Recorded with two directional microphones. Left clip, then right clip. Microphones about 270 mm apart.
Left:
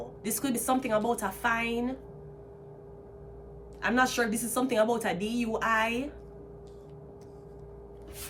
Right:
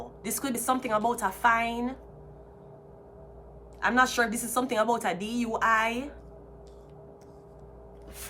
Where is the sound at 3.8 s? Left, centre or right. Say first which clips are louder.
Right 3 dB; centre.